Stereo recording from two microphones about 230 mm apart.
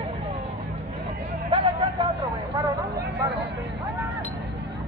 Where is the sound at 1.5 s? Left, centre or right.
Right.